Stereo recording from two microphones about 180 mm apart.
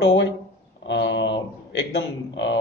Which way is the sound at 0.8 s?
75° left (ahead or behind).